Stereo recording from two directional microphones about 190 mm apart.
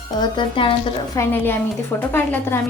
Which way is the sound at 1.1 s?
10° left (ahead or behind).